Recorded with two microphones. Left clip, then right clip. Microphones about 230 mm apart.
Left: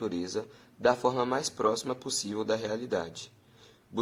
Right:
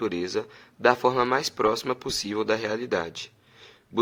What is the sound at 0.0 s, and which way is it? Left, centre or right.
Speech, right.